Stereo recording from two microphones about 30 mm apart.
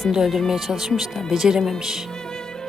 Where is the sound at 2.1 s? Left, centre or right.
Centre.